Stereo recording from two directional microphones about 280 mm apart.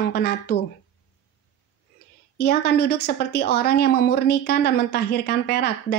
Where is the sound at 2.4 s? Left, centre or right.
Left.